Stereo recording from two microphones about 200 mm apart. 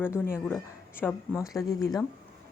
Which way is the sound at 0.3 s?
10° left (ahead or behind).